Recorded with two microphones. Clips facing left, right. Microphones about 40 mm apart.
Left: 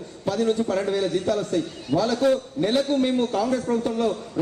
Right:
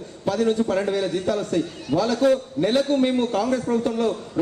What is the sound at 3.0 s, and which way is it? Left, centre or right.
Speech, right.